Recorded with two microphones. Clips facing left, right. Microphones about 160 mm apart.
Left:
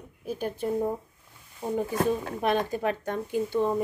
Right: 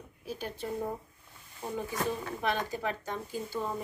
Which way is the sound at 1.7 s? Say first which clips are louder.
Left 7 dB; 50° left (ahead or behind).